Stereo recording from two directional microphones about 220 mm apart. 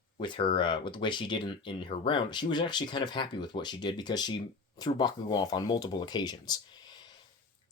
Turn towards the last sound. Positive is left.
turn(degrees=20)  # may be behind; listen again after turning